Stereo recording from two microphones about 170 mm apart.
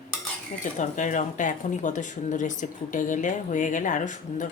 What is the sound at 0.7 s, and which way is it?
Speech, 45° left (ahead or behind).